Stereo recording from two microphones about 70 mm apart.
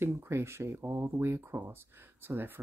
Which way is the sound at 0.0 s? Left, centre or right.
Right.